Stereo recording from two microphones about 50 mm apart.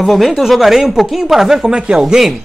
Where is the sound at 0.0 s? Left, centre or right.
Centre.